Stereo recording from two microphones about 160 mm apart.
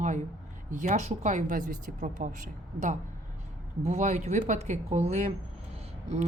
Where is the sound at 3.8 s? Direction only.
45° right (ahead or behind).